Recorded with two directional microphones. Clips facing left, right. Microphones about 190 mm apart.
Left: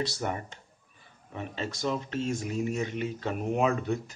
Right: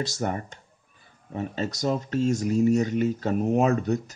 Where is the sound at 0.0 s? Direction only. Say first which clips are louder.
Right 3 dB; 45° right (ahead or behind).